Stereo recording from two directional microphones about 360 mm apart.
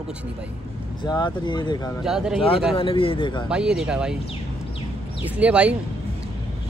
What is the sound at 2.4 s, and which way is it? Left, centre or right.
Speech, centre.